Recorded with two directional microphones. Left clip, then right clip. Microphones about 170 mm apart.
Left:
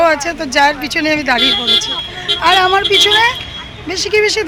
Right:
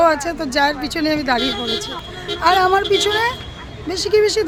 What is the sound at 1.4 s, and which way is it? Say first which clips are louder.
Speech: left 9 dB; 75° right (ahead or behind).